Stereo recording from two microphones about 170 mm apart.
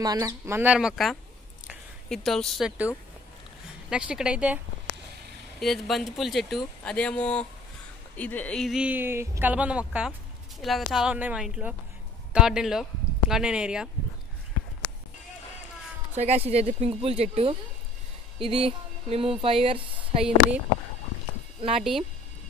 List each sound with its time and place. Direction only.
0.0 s speech: 20° right (ahead or behind); by 2.9 s centre (ahead or behind)
3.9 s speech: 5° right (ahead or behind)
5.6 s speech: centre (ahead or behind)
16.2 s speech: 40° right (ahead or behind)
21.5 s speech: 35° right (ahead or behind)